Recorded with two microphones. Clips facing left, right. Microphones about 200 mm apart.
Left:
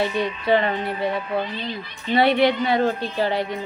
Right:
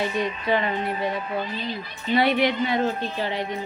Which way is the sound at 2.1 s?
30° left (ahead or behind).